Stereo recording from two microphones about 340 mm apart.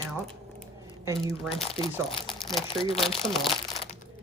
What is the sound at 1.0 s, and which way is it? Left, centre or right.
Speech, centre.